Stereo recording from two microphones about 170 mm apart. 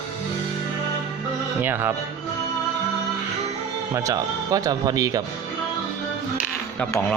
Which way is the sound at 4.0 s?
20° right (ahead or behind).